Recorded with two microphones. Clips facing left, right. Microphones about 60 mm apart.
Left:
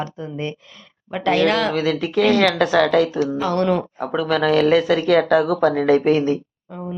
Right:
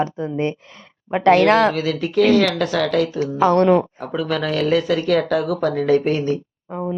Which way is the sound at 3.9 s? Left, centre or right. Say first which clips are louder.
Left 2 dB; centre.